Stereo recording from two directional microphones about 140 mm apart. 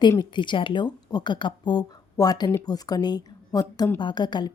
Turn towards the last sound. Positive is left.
turn(degrees=30)  # may be behind; listen again after turning